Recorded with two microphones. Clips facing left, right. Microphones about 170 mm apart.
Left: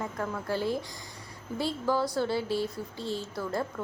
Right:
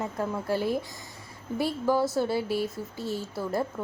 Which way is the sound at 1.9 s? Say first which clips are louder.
Right 3 dB; 25° right (ahead or behind).